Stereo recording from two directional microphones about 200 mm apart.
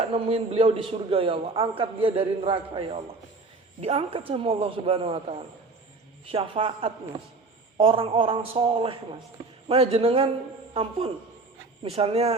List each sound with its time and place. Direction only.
0.1 s a man's voice: 30° right (ahead or behind)
6.2 s a man's voice: 30° right (ahead or behind)
11.8 s a man's voice: 30° right (ahead or behind)